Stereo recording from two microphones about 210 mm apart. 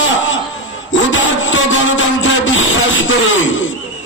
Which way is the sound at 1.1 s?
65° left (ahead or behind).